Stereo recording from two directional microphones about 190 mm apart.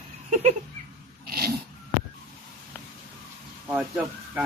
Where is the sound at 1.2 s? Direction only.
50° right (ahead or behind).